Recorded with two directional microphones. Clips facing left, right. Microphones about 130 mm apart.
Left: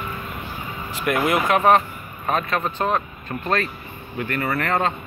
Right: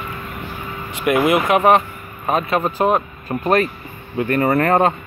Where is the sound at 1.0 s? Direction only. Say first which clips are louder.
Right 5 dB; centre (ahead or behind).